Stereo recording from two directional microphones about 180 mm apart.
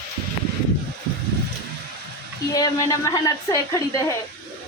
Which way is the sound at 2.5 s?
20° left (ahead or behind).